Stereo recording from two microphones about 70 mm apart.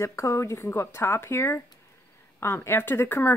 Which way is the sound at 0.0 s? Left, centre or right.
Left.